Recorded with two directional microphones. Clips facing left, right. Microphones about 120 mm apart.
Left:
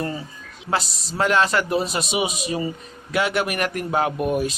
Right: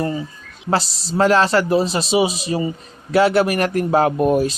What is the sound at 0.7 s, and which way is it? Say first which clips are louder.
A man's voice: right 5 dB; 30° right (ahead or behind).